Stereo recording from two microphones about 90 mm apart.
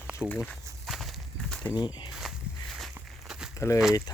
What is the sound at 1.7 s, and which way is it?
Speech, 55° left (ahead or behind).